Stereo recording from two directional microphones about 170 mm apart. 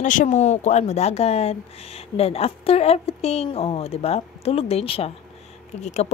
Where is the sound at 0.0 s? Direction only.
50° left (ahead or behind).